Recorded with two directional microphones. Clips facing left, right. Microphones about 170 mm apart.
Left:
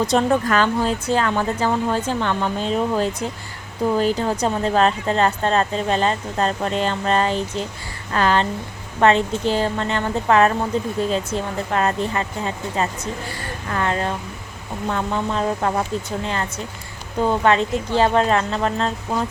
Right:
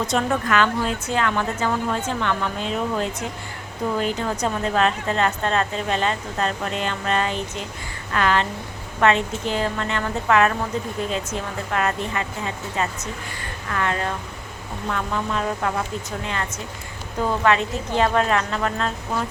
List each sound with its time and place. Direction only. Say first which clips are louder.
0.1 s speech: left 4 dB; 35° left (ahead or behind)